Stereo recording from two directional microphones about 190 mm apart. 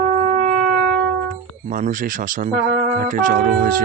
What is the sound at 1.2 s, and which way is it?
Speech, 45° right (ahead or behind).